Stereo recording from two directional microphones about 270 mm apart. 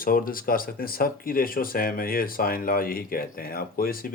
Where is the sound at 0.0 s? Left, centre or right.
Left.